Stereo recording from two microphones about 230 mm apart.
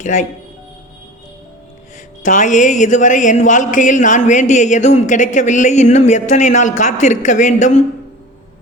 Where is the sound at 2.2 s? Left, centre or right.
Left.